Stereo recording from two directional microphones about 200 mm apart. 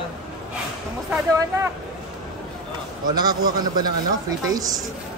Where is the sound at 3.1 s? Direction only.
20° right (ahead or behind).